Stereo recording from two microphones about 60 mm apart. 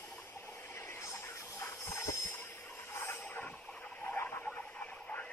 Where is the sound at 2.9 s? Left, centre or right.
Left.